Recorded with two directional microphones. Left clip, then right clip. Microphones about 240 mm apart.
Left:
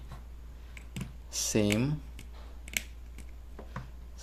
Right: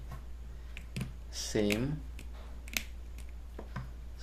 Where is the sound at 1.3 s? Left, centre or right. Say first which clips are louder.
Left 3 dB; left.